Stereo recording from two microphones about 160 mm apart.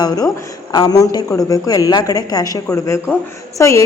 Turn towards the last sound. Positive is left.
turn(degrees=20)  # may be behind; listen again after turning